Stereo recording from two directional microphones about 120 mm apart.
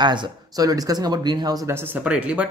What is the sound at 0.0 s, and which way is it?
Speech, 40° right (ahead or behind).